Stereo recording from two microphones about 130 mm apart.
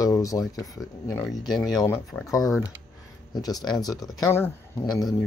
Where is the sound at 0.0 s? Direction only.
25° left (ahead or behind).